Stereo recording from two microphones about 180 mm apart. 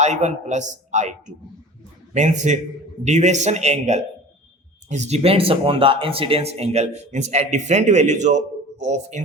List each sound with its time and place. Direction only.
0.0 s speech: 40° right (ahead or behind)
2.1 s speech: 40° right (ahead or behind)